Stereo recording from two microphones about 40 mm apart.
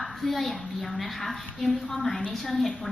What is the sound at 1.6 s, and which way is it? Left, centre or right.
Speech, left.